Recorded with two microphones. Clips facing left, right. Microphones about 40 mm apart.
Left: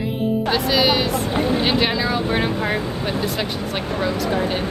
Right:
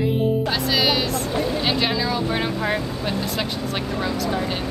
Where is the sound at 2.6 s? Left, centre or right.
Centre.